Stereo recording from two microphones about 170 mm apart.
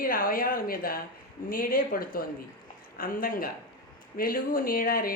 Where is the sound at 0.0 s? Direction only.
55° left (ahead or behind).